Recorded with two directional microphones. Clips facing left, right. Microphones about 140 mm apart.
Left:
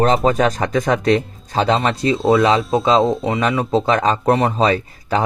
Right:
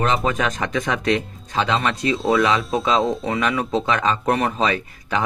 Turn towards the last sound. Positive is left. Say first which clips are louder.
# left 4 dB
turn(degrees=35)  # may be behind; listen again after turning